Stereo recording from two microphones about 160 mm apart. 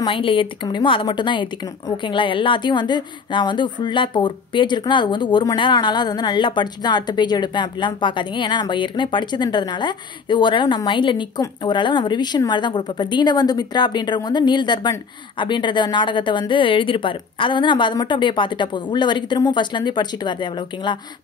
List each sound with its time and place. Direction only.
0.0 s speech: 35° left (ahead or behind)